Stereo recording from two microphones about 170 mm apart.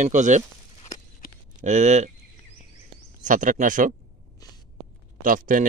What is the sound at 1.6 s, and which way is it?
Speech, 45° right (ahead or behind).